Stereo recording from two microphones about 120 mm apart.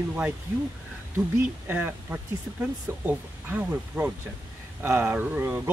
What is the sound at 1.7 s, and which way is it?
A man's voice, 20° right (ahead or behind).